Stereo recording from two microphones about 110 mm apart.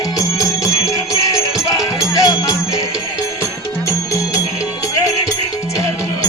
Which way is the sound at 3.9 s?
25° left (ahead or behind).